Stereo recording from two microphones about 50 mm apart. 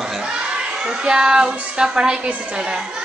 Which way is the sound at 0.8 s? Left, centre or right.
Centre.